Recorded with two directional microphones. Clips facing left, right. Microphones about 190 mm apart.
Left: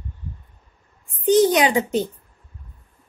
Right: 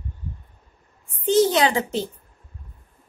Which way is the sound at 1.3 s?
15° left (ahead or behind).